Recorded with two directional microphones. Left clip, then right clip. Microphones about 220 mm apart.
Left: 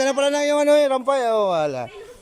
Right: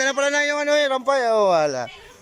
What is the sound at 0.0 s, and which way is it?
Speech, 10° left (ahead or behind).